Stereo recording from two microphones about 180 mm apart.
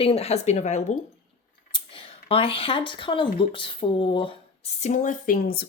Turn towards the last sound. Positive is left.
turn(degrees=55)  # may be behind; listen again after turning